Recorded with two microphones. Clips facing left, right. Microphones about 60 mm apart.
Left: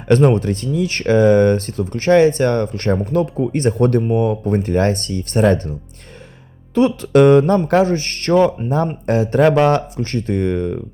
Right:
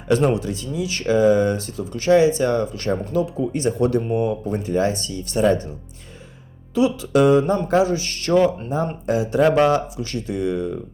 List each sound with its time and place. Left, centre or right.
0.1 s speech: left
6.7 s speech: left